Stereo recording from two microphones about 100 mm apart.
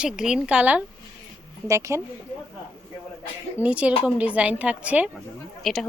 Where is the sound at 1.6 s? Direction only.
30° right (ahead or behind).